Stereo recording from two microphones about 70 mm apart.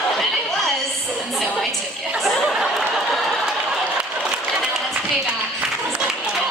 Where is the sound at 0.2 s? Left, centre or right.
Centre.